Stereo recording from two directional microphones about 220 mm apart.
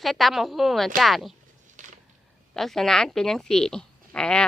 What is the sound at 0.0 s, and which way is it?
Speech, centre (ahead or behind).